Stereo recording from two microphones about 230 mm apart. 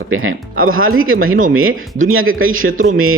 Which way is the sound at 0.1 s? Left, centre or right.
Right.